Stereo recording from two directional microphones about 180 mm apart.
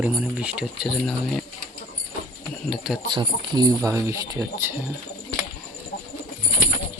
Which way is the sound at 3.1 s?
25° right (ahead or behind).